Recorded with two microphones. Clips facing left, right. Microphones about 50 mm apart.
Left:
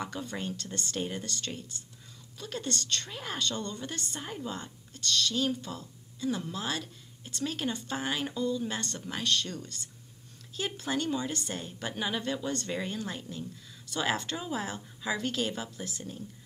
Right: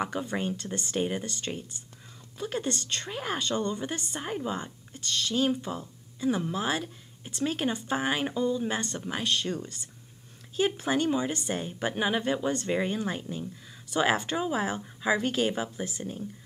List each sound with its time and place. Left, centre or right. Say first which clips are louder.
0.0 s a woman's voice: right 6 dB; right